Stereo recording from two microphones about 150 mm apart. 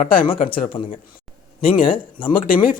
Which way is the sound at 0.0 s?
70° left (ahead or behind).